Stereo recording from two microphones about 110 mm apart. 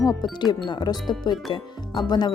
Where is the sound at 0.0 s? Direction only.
35° left (ahead or behind).